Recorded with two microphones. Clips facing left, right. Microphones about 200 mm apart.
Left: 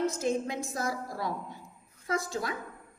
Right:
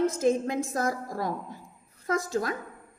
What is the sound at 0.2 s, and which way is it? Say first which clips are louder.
A woman's voice: right 5 dB; 50° right (ahead or behind).